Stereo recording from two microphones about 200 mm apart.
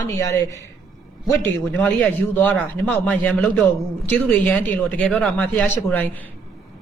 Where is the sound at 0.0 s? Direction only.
15° left (ahead or behind).